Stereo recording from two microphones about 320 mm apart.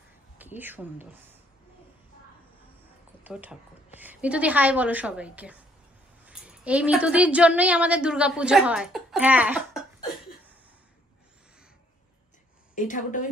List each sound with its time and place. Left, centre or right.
0.4 s speech: centre
3.3 s a woman's voice: centre
12.7 s a woman's voice: left